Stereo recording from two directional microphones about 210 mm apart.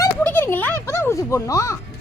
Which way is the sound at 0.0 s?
10° left (ahead or behind).